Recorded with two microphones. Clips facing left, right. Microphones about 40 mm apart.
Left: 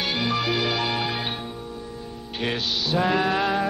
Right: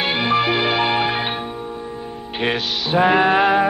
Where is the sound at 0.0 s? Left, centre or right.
Right.